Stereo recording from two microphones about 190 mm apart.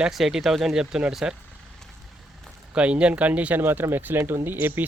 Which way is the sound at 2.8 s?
5° right (ahead or behind).